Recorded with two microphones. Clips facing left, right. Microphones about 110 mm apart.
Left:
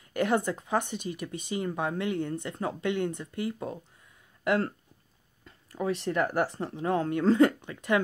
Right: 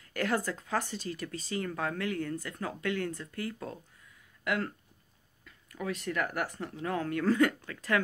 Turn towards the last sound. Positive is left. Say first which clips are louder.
# left 5 dB
turn(degrees=20)  # may be behind; listen again after turning